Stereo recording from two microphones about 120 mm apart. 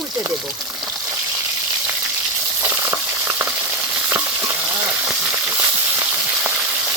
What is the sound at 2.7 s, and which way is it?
Frying, 15° right (ahead or behind).